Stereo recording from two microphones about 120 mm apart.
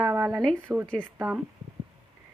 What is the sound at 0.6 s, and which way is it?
Speech, 20° right (ahead or behind).